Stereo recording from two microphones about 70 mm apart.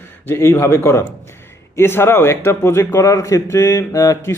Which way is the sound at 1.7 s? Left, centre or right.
Left.